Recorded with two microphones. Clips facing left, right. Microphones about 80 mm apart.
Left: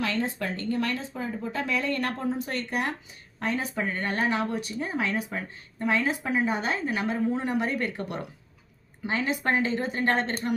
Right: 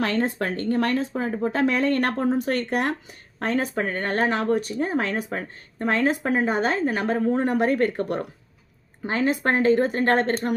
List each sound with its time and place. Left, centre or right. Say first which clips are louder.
0.0 s speech: right 5 dB; right